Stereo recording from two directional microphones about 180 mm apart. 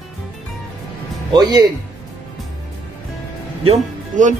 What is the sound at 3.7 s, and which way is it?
Speech, 45° right (ahead or behind).